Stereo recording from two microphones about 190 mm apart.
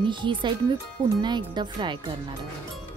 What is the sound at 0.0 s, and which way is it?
Speech, 25° right (ahead or behind).